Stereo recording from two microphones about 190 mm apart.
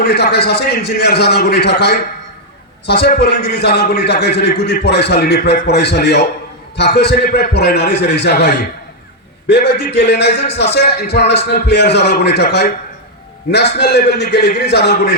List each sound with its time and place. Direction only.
0.0 s a man's voice: 60° left (ahead or behind)